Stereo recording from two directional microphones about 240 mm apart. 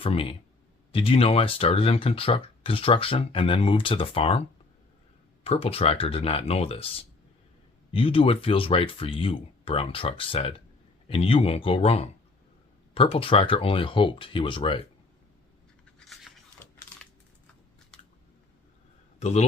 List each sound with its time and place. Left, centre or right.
0.0 s speech: left
16.0 s a sound: centre
19.2 s speech: left